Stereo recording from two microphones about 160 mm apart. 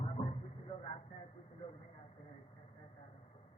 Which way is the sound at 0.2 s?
40° left (ahead or behind).